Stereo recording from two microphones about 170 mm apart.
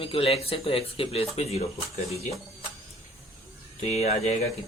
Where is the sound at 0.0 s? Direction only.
30° left (ahead or behind).